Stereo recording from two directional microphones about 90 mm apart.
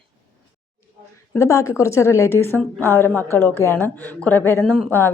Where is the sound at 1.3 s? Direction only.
35° left (ahead or behind).